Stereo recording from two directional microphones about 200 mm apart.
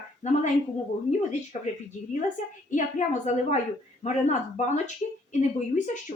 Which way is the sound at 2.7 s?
35° left (ahead or behind).